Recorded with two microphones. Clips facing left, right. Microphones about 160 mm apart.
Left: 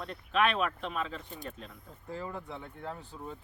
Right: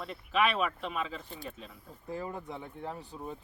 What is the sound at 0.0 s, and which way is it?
Speech, 5° right (ahead or behind).